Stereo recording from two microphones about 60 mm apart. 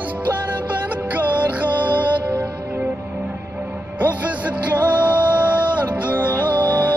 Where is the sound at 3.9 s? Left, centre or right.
Right.